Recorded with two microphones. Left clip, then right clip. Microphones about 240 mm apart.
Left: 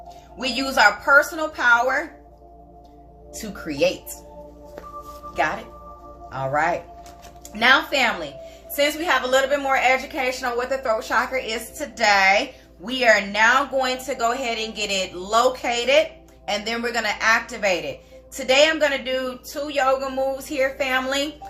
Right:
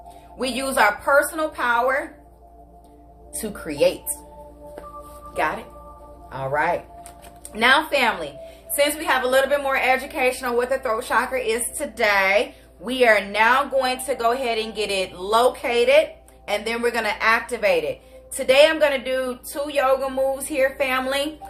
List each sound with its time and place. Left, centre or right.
0.4 s a woman's voice: centre
3.7 s a woman's voice: centre
6.3 s a woman's voice: centre